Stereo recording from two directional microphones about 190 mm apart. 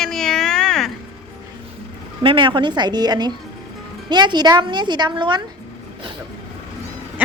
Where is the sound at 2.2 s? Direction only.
25° right (ahead or behind).